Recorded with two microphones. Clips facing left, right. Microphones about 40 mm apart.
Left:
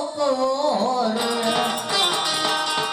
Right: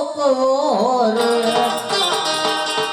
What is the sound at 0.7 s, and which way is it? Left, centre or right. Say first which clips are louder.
Music: right 5 dB; centre.